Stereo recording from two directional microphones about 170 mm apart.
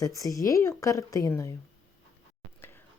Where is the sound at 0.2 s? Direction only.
20° left (ahead or behind).